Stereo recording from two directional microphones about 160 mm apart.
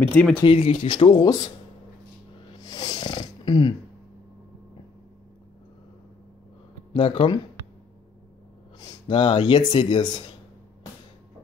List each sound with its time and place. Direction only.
0.1 s speech: 5° left (ahead or behind)
0.4 s speech: 35° left (ahead or behind)
2.6 s a sound: 25° left (ahead or behind)
6.9 s speech: 35° left (ahead or behind)
8.7 s speech: 30° left (ahead or behind)